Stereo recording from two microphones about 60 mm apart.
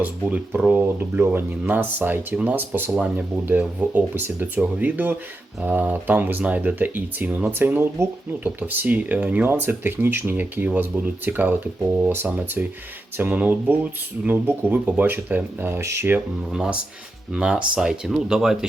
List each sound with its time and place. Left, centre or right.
0.0 s speech: right
15.8 s speech: right
16.5 s speech: centre